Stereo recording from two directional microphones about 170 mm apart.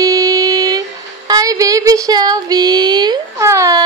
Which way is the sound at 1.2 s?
20° right (ahead or behind).